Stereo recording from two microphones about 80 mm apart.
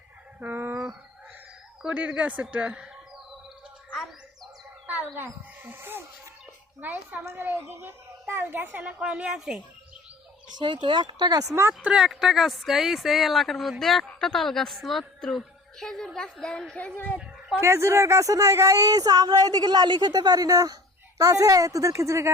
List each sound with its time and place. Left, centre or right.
0.3 s a sound: right
1.8 s speech: centre
4.9 s a woman's voice: right; by 9.6 s centre
10.6 s speech: right
11.8 s speech: centre
16.7 s speech: centre
17.6 s speech: right